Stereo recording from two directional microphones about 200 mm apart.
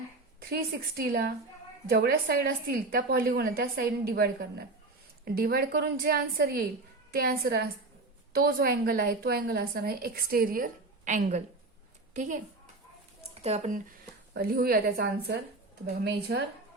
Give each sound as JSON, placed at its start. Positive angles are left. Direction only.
{"t": 0.3, "sound": "a woman's voice", "side_deg": -50}
{"t": 13.4, "sound": "speech", "side_deg": -30}
{"t": 14.3, "sound": "a woman's voice", "side_deg": -50}